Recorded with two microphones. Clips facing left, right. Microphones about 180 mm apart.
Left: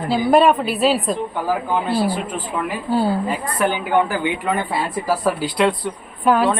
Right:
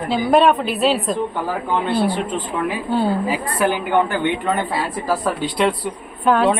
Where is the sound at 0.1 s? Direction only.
Centre (ahead or behind).